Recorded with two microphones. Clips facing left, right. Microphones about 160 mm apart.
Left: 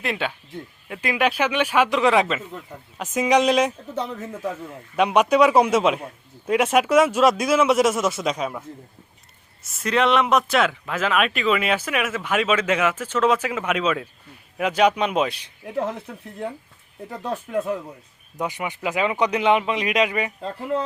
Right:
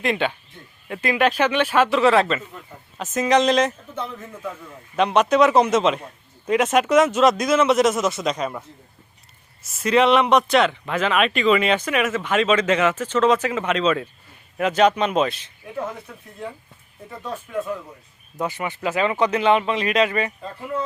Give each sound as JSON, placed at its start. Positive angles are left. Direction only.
{"t": 0.0, "sound": "speech", "side_deg": 5}
{"t": 4.9, "sound": "speech", "side_deg": 10}
{"t": 9.6, "sound": "speech", "side_deg": 0}
{"t": 17.1, "sound": "speech", "side_deg": 70}
{"t": 18.4, "sound": "speech", "side_deg": 15}